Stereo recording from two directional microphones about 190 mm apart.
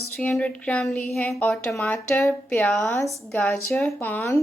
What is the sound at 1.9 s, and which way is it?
A woman's voice, 10° left (ahead or behind).